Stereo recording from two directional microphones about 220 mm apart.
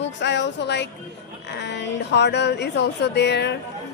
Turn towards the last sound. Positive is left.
turn(degrees=50)  # may be behind; listen again after turning